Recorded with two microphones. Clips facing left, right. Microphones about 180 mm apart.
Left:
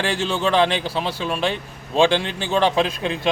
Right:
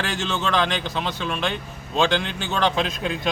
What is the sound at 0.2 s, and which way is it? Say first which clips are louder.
Speech: left 4 dB; 30° left (ahead or behind).